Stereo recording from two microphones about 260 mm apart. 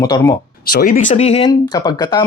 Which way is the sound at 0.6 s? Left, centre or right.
Left.